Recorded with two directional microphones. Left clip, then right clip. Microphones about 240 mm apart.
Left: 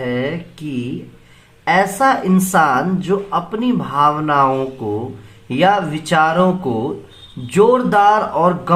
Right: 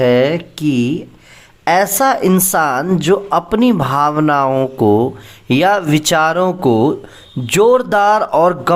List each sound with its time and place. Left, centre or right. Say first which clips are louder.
0.0 s speech: right 9 dB; right
1.6 s speech: right 1 dB; right